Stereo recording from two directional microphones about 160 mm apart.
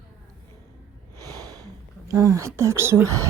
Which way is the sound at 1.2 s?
20° right (ahead or behind).